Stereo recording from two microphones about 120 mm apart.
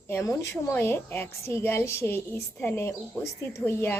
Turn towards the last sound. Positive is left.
turn(degrees=20)  # may be behind; listen again after turning